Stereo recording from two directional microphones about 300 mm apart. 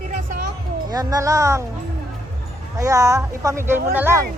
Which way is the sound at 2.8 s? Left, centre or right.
Centre.